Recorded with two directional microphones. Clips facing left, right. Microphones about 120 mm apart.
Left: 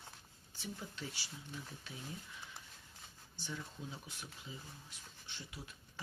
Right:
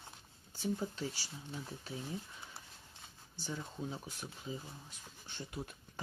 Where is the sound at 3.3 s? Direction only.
35° right (ahead or behind).